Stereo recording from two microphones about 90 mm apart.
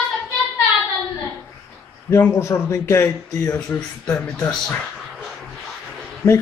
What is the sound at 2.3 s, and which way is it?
Speech, 30° left (ahead or behind).